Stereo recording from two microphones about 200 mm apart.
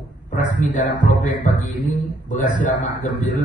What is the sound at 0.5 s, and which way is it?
Speech, 40° left (ahead or behind).